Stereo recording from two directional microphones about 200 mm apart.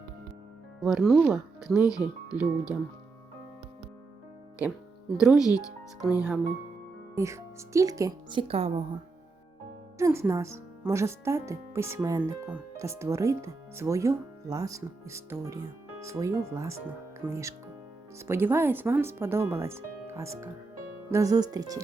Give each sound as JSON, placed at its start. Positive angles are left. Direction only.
{"t": 0.8, "sound": "speech", "side_deg": 0}
{"t": 5.1, "sound": "speech", "side_deg": -5}
{"t": 7.2, "sound": "speech", "side_deg": -15}
{"t": 10.0, "sound": "speech", "side_deg": -15}